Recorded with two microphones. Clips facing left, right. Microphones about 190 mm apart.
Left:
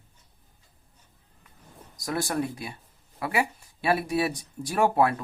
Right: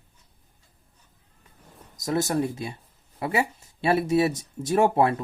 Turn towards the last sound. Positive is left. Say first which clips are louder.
# right 2 dB
turn(degrees=-25)  # may be behind; listen again after turning